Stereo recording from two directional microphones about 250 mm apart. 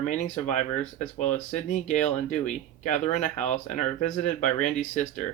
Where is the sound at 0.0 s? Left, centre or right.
Left.